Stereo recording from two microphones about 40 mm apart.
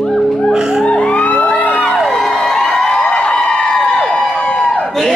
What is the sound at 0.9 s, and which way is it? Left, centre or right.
Music, left.